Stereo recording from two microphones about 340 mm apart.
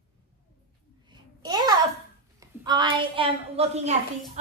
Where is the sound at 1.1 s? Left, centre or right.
Centre.